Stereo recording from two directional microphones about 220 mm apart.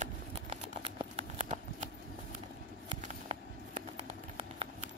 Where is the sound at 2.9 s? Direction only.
25° right (ahead or behind).